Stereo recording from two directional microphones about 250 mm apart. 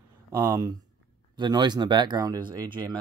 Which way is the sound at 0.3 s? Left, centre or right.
Centre.